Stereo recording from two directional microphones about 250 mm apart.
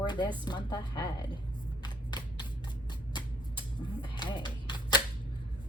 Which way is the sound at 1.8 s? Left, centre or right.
Centre.